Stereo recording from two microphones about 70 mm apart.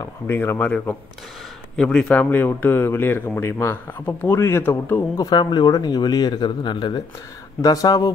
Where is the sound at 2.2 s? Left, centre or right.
Left.